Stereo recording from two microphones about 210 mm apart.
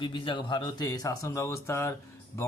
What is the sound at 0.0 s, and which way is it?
A man's voice, 25° left (ahead or behind).